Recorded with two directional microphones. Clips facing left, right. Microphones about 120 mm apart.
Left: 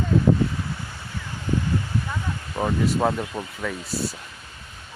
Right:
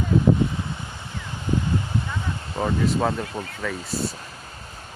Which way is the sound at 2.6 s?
10° left (ahead or behind).